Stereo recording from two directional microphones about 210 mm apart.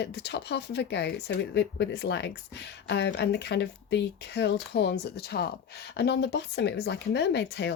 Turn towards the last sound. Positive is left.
turn(degrees=55)  # may be behind; listen again after turning